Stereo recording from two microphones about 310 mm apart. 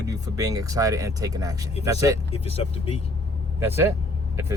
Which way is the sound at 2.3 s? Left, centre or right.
Centre.